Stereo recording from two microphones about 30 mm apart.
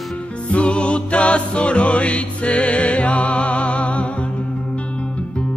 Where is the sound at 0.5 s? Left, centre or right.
Left.